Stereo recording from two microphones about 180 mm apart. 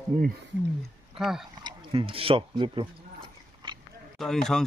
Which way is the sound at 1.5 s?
25° right (ahead or behind).